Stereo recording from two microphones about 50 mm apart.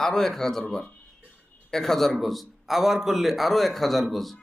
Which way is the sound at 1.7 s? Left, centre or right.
Centre.